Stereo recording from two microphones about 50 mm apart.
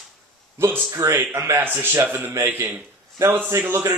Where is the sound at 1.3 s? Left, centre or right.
Right.